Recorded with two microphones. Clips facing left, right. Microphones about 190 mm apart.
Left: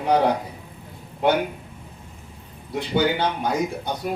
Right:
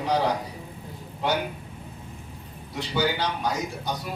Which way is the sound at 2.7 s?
55° left (ahead or behind).